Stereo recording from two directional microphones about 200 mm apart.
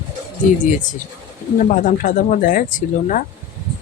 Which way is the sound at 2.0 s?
40° left (ahead or behind).